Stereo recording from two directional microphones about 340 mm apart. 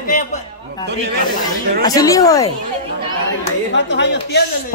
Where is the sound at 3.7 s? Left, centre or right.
Left.